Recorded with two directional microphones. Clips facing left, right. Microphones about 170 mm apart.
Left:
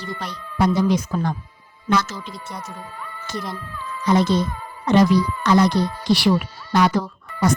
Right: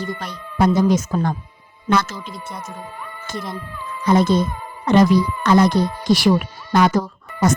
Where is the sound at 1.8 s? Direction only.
55° right (ahead or behind).